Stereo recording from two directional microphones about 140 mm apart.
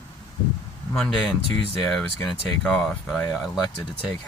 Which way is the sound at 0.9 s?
5° left (ahead or behind).